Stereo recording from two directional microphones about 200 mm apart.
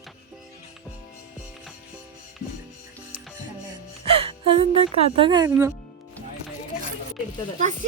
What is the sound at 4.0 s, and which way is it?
Speech, 30° right (ahead or behind).